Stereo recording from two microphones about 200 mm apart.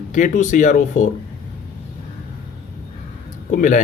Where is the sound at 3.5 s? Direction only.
40° left (ahead or behind).